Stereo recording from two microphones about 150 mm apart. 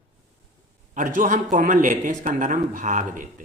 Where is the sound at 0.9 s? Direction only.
60° right (ahead or behind).